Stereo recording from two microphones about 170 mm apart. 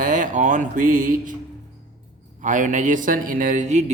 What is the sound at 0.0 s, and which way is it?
Speech, 50° right (ahead or behind).